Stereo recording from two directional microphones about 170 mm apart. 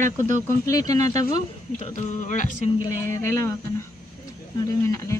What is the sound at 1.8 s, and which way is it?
Speech, 45° left (ahead or behind).